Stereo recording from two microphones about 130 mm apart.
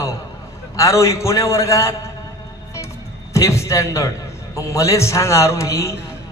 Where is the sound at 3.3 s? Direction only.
20° left (ahead or behind).